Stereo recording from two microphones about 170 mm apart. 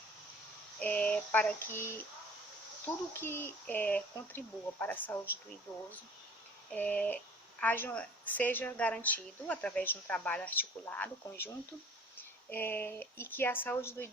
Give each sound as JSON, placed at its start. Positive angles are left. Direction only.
{"t": 0.8, "sound": "a sound", "side_deg": 10}
{"t": 2.8, "sound": "a woman's voice", "side_deg": 15}
{"t": 6.7, "sound": "a woman's voice", "side_deg": 10}